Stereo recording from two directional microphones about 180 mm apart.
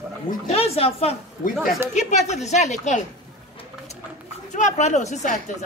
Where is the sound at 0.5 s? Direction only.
35° left (ahead or behind).